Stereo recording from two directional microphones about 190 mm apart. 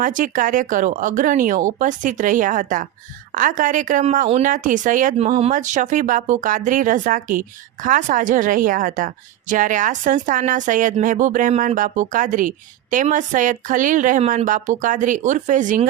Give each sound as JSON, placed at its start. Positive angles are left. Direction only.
{"t": 0.0, "sound": "speech", "side_deg": -45}